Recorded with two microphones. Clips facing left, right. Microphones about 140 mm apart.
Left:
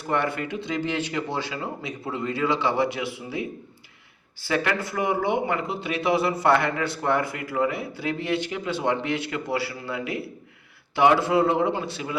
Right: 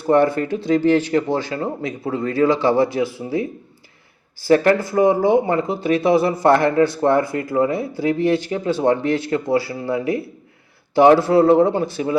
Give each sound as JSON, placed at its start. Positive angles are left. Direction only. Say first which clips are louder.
{"t": 0.1, "sound": "speech", "louder": "right 10 dB", "side_deg": -40}
{"t": 4.4, "sound": "speech", "louder": "right 11 dB", "side_deg": -40}